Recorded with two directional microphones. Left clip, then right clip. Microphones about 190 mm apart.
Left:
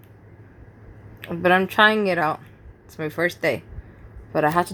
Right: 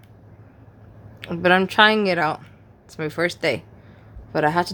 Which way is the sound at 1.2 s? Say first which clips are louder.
Right 1 dB; 15° right (ahead or behind).